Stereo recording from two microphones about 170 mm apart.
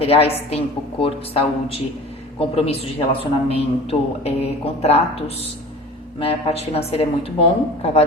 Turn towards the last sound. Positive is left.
turn(degrees=35)  # may be behind; listen again after turning